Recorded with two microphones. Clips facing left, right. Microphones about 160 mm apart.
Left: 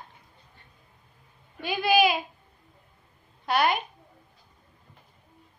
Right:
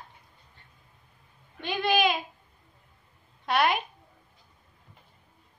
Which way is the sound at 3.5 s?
Centre (ahead or behind).